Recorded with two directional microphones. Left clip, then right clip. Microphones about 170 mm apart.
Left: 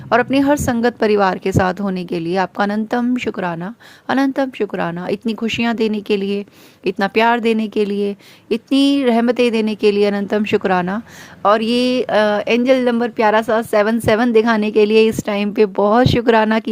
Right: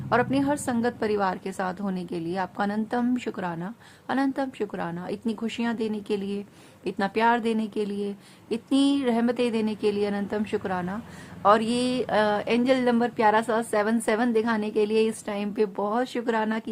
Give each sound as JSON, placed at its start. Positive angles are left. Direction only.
{"t": 0.1, "sound": "a woman's voice", "side_deg": 40}